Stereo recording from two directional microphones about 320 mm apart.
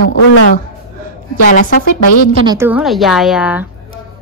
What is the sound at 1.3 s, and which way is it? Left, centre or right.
Speech, left.